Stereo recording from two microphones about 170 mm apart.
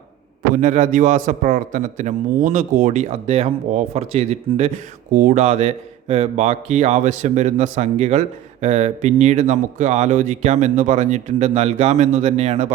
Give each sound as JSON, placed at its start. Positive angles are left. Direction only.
{"t": 0.5, "sound": "a man's voice", "side_deg": -45}